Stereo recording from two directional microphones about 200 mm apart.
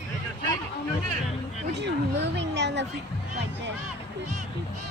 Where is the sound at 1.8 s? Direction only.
60° right (ahead or behind).